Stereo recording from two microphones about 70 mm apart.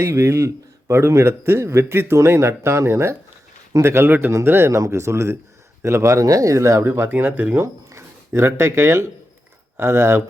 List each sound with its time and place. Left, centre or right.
0.0 s a man's voice: right
4.7 s a man's voice: right
7.6 s a man's voice: right